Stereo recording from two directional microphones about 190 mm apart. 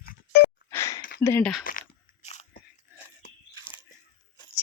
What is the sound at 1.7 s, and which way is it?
Crunch, 45° left (ahead or behind).